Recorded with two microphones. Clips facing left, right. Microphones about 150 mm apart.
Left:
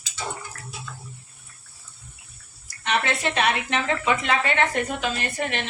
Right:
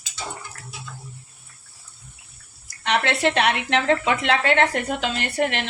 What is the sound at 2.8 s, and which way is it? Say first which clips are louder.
Speech: right 4 dB; 75° right (ahead or behind).